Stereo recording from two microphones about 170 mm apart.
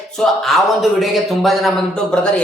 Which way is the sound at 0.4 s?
Centre (ahead or behind).